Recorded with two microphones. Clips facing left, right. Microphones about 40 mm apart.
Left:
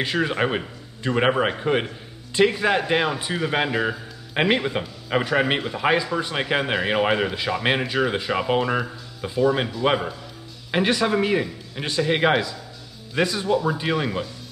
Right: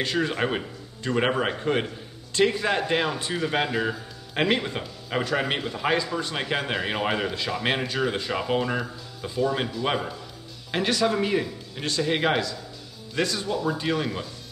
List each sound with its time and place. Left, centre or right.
0.0 s a man's voice: centre